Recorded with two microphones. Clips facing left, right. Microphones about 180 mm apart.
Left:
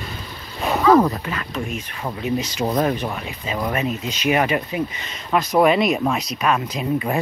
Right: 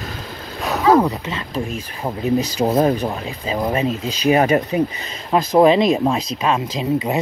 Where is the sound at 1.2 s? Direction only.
25° right (ahead or behind).